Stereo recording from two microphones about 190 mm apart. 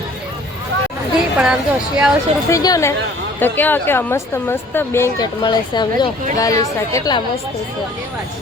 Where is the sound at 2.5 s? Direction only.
20° left (ahead or behind).